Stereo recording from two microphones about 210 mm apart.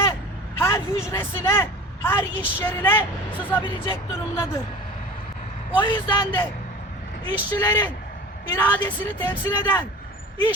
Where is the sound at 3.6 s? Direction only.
20° left (ahead or behind).